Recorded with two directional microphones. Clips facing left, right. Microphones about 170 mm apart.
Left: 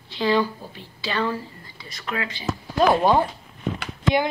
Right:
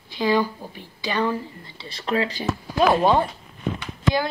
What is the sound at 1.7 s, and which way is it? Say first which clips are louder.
Speech: right 6 dB; 30° right (ahead or behind).